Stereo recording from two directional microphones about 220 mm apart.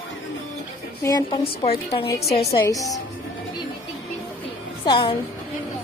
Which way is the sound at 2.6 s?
15° left (ahead or behind).